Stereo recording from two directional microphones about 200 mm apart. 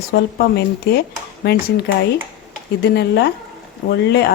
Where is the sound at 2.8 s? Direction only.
55° left (ahead or behind).